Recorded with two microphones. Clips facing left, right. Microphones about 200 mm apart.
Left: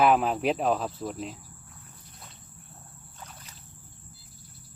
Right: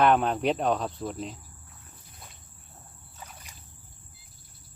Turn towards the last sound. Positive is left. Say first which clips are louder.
# even
turn(degrees=-10)  # may be behind; listen again after turning